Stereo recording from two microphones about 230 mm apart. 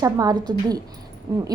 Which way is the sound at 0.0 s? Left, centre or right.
Centre.